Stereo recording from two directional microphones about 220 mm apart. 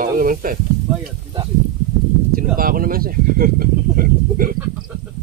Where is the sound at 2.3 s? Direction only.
40° right (ahead or behind).